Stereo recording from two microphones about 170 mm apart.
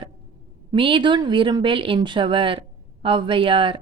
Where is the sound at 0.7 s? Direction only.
30° right (ahead or behind).